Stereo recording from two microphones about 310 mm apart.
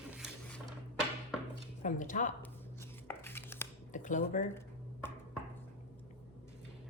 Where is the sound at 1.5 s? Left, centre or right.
Left.